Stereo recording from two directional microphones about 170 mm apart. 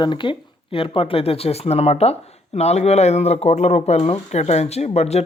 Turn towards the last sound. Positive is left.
turn(degrees=40)  # may be behind; listen again after turning